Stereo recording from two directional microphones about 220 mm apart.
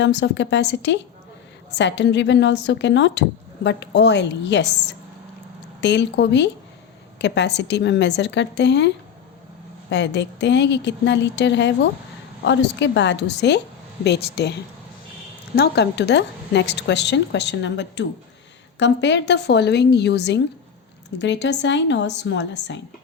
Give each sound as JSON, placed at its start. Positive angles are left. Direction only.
{"t": 0.0, "sound": "speech", "side_deg": 50}
{"t": 9.9, "sound": "speech", "side_deg": 55}